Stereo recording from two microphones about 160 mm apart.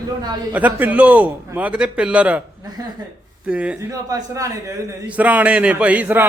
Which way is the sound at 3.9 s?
25° right (ahead or behind).